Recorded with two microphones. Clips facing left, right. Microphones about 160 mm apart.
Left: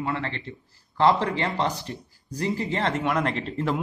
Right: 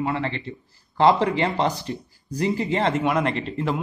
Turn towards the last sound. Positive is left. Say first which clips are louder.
# right 2 dB
turn(degrees=0)  # may be behind; listen again after turning